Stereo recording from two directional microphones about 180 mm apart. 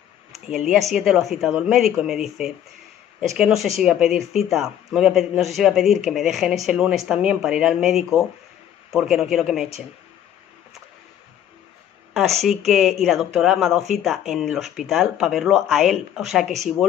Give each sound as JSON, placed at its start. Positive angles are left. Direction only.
{"t": 0.5, "sound": "speech", "side_deg": 0}
{"t": 12.1, "sound": "speech", "side_deg": 0}